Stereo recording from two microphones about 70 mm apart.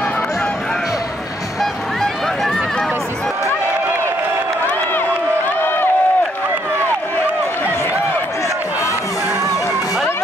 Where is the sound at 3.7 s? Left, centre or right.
Right.